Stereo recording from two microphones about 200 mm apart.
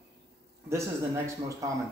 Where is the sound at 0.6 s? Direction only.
15° right (ahead or behind).